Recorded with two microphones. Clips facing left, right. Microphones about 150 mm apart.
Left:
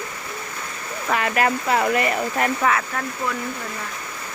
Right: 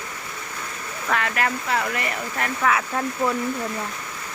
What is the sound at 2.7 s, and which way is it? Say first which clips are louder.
Speech: right 2 dB; centre (ahead or behind).